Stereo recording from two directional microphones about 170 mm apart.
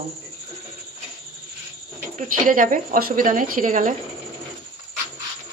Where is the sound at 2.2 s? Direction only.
50° right (ahead or behind).